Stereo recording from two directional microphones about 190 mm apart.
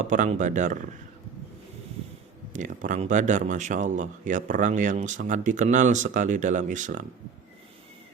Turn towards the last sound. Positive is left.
turn(degrees=-40)  # may be behind; listen again after turning